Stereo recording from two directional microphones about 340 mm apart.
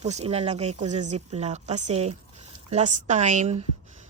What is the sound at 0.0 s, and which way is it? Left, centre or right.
A woman's voice, centre.